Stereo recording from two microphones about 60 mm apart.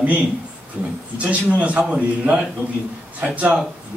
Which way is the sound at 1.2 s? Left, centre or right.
Right.